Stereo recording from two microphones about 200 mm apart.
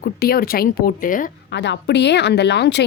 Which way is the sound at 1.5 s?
60° left (ahead or behind).